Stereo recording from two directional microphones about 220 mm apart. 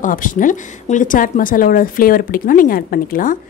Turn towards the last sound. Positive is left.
turn(degrees=40)  # may be behind; listen again after turning